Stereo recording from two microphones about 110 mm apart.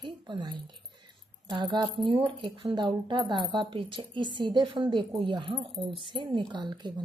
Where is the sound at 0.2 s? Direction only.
45° right (ahead or behind).